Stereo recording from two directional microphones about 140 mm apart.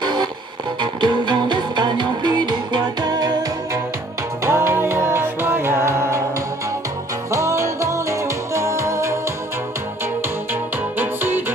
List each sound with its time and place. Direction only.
0.0 s music: 35° right (ahead or behind)
4.5 s music: 15° right (ahead or behind)
7.2 s music: 20° right (ahead or behind)
11.0 s music: 15° right (ahead or behind)